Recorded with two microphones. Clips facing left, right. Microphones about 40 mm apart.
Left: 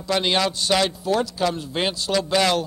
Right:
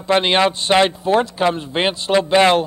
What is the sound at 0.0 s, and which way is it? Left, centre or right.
A man's voice, right.